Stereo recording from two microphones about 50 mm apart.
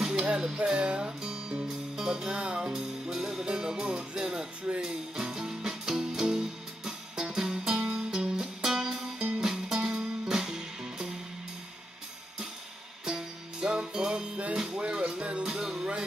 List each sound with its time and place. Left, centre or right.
0.0 s music: centre
13.0 s music: centre
15.4 s music: centre